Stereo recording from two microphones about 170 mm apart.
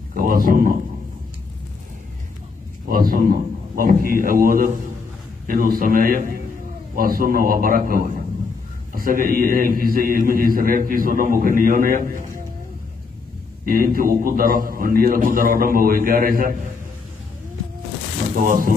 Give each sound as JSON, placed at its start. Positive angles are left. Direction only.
{"t": 0.1, "sound": "a man's voice", "side_deg": -55}
{"t": 2.9, "sound": "a man's voice", "side_deg": -60}
{"t": 13.7, "sound": "a man's voice", "side_deg": -55}
{"t": 18.4, "sound": "speech", "side_deg": -55}